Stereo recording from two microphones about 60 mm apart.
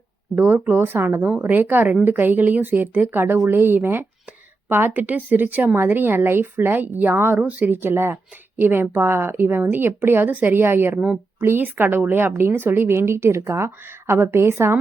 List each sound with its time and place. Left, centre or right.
0.3 s speech: right
3.3 s a woman's voice: right
3.6 s speech: right
7.3 s speech: right
7.7 s a woman's voice: right